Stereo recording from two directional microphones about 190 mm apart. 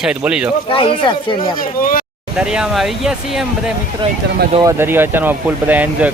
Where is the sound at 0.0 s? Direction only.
5° right (ahead or behind).